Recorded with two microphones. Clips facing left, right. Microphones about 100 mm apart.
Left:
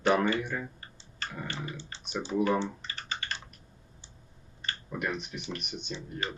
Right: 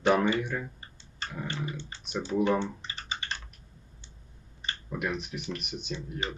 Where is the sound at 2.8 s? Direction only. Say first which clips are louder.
Even; 20° right (ahead or behind).